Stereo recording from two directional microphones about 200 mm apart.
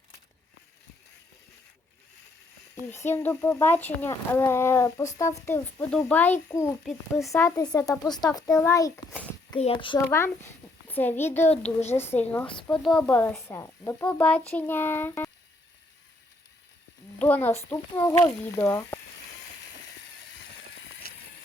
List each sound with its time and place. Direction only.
2.8 s speech: 10° left (ahead or behind)
6.8 s speech: centre (ahead or behind)
7.3 s speech: 15° left (ahead or behind)
9.6 s a child's voice: 25° left (ahead or behind)
10.1 s a child's voice: 10° left (ahead or behind)
11.4 s a woman's voice: 35° left (ahead or behind)
12.2 s speech: 10° left (ahead or behind)
17.2 s speech: 10° left (ahead or behind)